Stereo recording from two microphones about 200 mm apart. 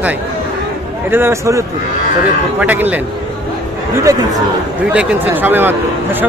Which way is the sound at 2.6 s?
10° right (ahead or behind).